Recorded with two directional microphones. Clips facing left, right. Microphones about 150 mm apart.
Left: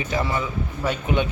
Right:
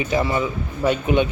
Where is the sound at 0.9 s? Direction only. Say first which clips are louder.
Right 5 dB; 20° right (ahead or behind).